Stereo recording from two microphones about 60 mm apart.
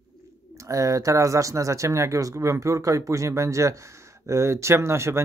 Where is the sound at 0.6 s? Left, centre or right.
Right.